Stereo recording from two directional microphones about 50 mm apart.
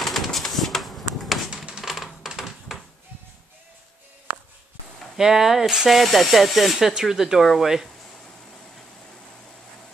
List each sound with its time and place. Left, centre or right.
0.0 s a sound: centre
4.3 s music: right
5.1 s speech: centre
6.9 s speech: centre